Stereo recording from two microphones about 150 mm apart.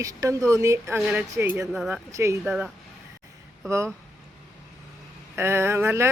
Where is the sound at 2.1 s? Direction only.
20° right (ahead or behind).